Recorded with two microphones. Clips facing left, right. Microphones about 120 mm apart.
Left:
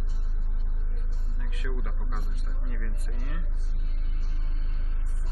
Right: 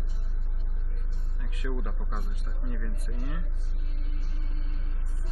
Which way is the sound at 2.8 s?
15° right (ahead or behind).